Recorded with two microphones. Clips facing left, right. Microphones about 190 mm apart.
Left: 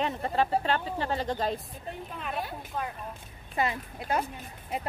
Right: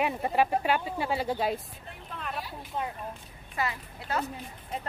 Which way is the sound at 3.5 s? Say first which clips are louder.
Left 3 dB; 20° left (ahead or behind).